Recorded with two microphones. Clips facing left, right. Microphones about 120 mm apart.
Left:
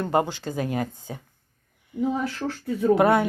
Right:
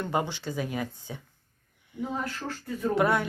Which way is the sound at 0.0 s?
50° left (ahead or behind).